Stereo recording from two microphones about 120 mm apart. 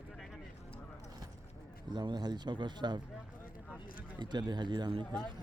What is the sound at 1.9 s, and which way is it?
Speech, 40° right (ahead or behind).